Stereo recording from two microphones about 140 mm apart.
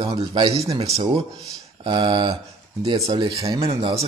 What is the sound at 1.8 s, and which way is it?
A man's voice, 35° right (ahead or behind).